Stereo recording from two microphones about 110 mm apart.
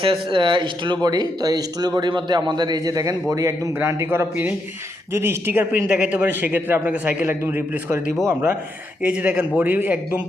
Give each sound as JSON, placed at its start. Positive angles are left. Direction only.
{"t": 0.0, "sound": "a man's voice", "side_deg": -50}
{"t": 9.0, "sound": "a man's voice", "side_deg": -10}